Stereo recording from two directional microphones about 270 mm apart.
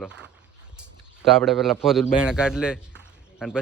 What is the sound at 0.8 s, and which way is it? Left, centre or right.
A man's voice, centre.